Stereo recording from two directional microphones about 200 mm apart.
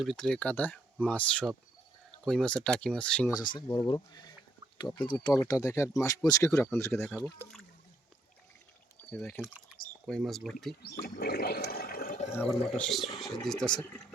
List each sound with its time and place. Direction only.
0.0 s speech: centre (ahead or behind)
3.5 s speech: 25° left (ahead or behind)
9.0 s speech: 5° left (ahead or behind)
11.0 s toilet flush: 50° left (ahead or behind)
12.3 s speech: 10° left (ahead or behind)